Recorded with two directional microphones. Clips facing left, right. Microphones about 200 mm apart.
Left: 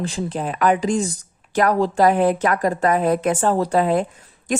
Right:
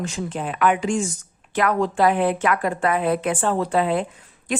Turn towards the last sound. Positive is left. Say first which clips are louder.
# left 2 dB
turn(degrees=40)  # may be behind; listen again after turning